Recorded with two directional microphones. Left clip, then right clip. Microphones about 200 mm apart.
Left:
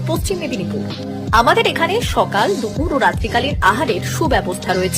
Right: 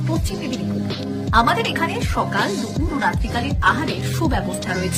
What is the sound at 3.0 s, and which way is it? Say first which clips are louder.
Speech: left 6 dB; 20° left (ahead or behind).